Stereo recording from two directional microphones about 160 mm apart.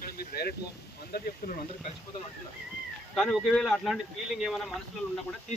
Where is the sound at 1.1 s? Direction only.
85° left.